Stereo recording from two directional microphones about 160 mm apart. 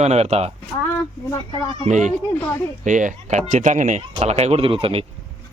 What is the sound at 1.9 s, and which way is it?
Speech, 50° right (ahead or behind).